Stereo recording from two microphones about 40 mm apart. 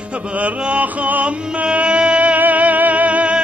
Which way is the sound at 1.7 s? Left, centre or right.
Right.